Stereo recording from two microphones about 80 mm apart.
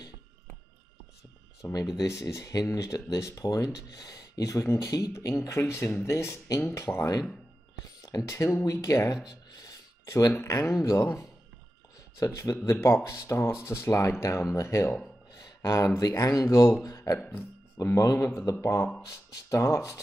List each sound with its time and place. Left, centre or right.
1.6 s speech: left
5.6 s speech: left
7.0 s speech: left
9.2 s a sound: left
10.0 s speech: left
12.5 s speech: left
12.8 s speech: left
15.3 s a sound: left
16.0 s speech: left